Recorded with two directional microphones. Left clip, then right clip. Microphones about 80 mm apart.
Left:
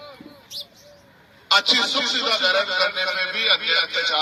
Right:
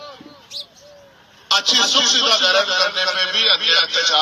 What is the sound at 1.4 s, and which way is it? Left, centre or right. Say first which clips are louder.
A man's voice: right 2 dB; right.